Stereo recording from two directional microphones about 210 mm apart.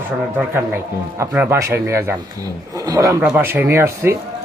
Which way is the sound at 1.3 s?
10° right (ahead or behind).